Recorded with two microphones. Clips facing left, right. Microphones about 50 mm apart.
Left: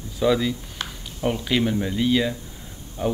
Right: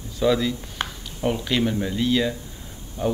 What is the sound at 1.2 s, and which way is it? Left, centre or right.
Speech, centre.